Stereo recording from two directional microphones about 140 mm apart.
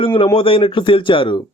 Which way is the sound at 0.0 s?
40° left (ahead or behind).